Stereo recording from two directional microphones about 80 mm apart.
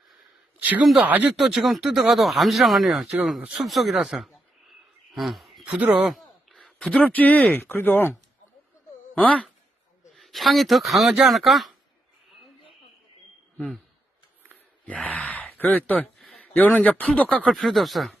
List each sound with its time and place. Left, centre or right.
0.6 s speech: centre
1.4 s speech: centre
5.1 s a sound: centre
7.1 s speech: centre
9.1 s speech: centre
10.2 s speech: centre
14.8 s speech: centre
16.1 s a sound: centre
16.4 s speech: centre
17.4 s speech: centre